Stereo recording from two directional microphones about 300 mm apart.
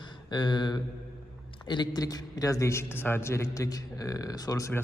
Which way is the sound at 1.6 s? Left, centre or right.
Centre.